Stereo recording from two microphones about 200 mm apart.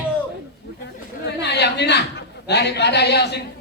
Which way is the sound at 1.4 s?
60° left (ahead or behind).